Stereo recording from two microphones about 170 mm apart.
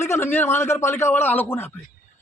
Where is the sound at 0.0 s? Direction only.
15° left (ahead or behind).